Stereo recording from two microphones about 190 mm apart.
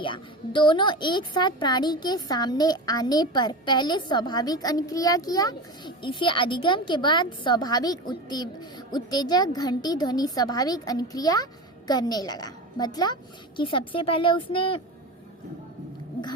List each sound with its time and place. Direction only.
0.0 s a woman's voice: 25° left (ahead or behind)